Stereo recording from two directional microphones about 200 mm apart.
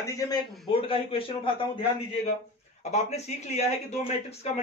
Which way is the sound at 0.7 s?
25° left (ahead or behind).